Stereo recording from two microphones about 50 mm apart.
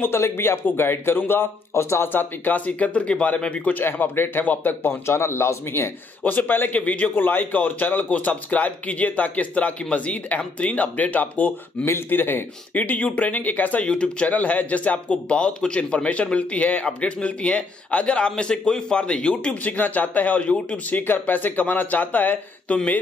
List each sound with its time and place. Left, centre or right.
0.0 s a man's voice: left
1.7 s a man's voice: left
2.1 s speech: left
3.8 s speech: left
5.0 s a man's voice: left
6.2 s speech: left
11.8 s speech: left
13.9 s speech: left
19.6 s speech: left
21.1 s speech: left